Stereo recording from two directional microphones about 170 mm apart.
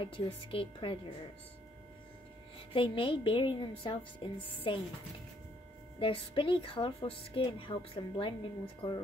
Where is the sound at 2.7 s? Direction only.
30° left (ahead or behind).